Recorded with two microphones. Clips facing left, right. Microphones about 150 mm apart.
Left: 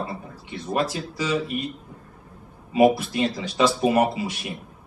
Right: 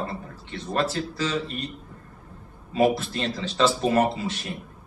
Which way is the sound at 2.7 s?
15° left (ahead or behind).